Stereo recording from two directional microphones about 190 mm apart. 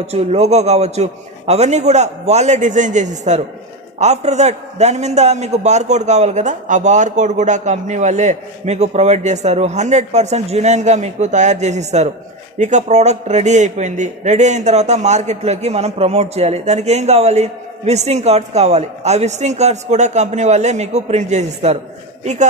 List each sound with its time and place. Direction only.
0.0 s a man's voice: 35° right (ahead or behind)